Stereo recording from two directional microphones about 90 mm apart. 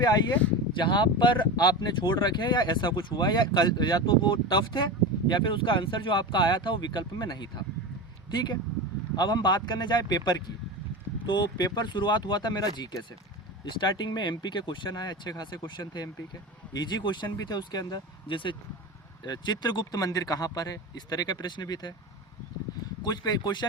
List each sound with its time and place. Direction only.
0.0 s speech: 50° left (ahead or behind)
0.8 s speech: 65° left (ahead or behind)
9.1 s speech: 50° left (ahead or behind)
18.3 s speech: 65° left (ahead or behind)
19.2 s speech: 55° left (ahead or behind)
23.0 s speech: 50° left (ahead or behind)